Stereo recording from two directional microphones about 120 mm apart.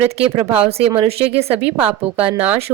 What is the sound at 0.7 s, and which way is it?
Speech, 55° right (ahead or behind).